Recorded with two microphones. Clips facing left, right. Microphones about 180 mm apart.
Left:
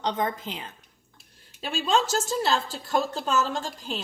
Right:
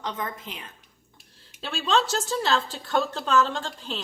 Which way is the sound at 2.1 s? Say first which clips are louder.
Even; 40° left (ahead or behind).